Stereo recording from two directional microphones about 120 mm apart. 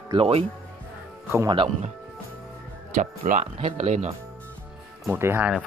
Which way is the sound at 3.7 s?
80° right.